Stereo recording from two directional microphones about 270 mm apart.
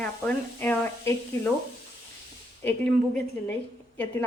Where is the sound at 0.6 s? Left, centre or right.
Centre.